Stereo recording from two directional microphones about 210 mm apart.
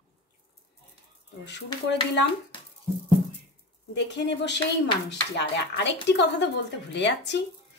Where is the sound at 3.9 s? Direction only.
55° left (ahead or behind).